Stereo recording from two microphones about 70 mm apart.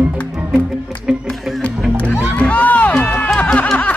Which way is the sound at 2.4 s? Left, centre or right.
Left.